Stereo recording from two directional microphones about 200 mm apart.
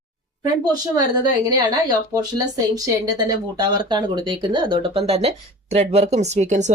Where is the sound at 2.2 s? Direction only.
20° right (ahead or behind).